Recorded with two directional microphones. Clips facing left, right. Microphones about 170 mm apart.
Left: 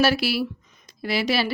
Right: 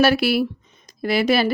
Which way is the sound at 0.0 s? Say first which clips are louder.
Right 4 dB; 55° right (ahead or behind).